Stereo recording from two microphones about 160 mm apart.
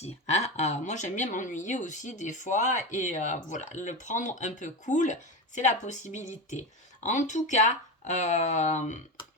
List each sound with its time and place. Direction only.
0.0 s speech: 45° left (ahead or behind)